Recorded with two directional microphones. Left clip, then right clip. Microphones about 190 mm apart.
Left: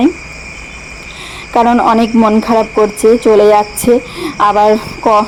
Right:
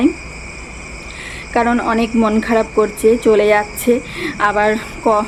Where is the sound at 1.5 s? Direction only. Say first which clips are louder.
Left 7 dB; 25° left (ahead or behind).